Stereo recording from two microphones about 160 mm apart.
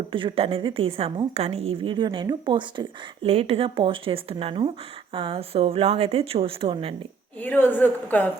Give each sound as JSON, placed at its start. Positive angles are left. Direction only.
{"t": 0.1, "sound": "a woman's voice", "side_deg": -30}
{"t": 3.2, "sound": "a woman's voice", "side_deg": -40}
{"t": 7.4, "sound": "a woman's voice", "side_deg": 10}